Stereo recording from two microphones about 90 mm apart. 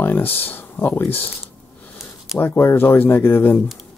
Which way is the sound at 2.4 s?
25° left (ahead or behind).